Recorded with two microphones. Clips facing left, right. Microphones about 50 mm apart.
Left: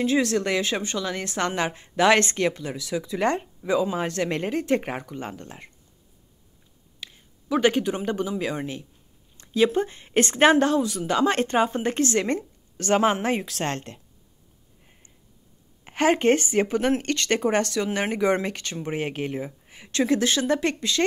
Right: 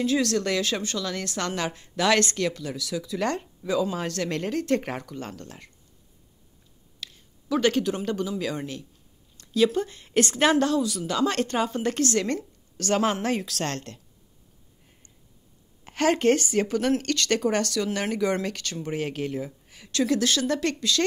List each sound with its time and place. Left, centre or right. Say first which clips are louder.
0.0 s a woman's voice: left 2 dB; left
7.0 s a woman's voice: even; left
15.8 s a woman's voice: left 2 dB; left